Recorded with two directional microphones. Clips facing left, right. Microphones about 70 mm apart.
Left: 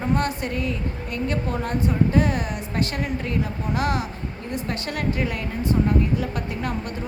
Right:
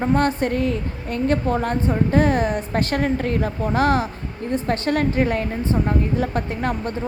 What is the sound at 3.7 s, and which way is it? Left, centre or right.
A woman's voice, right.